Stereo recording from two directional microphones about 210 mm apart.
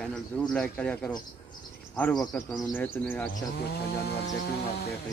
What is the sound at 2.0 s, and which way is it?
Speech, 10° left (ahead or behind).